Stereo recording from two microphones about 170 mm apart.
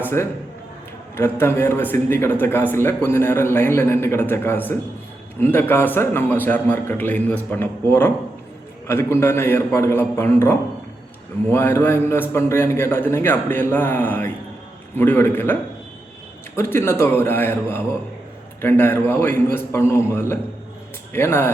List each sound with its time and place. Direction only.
0.0 s a man's voice: 15° left (ahead or behind)
16.6 s a man's voice: 15° left (ahead or behind)